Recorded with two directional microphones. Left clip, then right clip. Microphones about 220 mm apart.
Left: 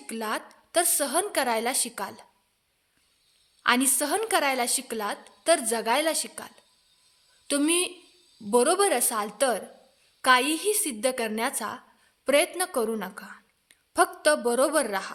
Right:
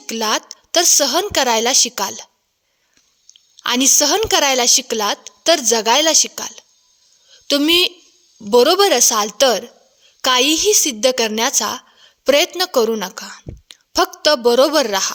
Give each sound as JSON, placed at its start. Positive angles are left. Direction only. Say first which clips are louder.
{"t": 0.1, "sound": "a woman's voice", "louder": "right 12 dB", "side_deg": -40}
{"t": 3.6, "sound": "a woman's voice", "louder": "right 9 dB", "side_deg": -40}